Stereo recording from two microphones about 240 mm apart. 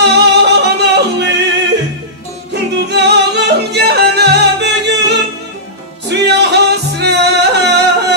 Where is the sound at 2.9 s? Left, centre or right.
Right.